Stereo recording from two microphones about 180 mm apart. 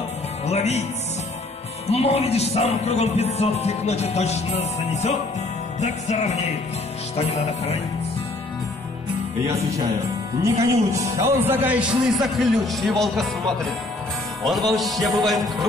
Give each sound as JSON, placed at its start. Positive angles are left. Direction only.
{"t": 0.5, "sound": "speech", "side_deg": 35}
{"t": 1.9, "sound": "speech", "side_deg": 35}
{"t": 10.4, "sound": "a man's voice", "side_deg": -15}
{"t": 14.4, "sound": "speech", "side_deg": 0}